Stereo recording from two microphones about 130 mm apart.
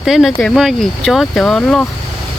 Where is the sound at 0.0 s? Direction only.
5° right (ahead or behind).